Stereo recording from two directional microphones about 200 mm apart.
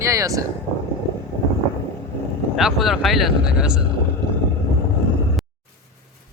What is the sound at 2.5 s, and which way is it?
Speech, centre (ahead or behind).